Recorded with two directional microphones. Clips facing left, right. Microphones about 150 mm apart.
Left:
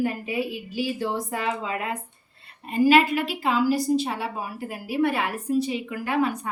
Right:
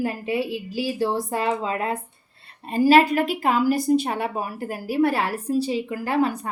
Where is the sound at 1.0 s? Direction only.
35° right (ahead or behind).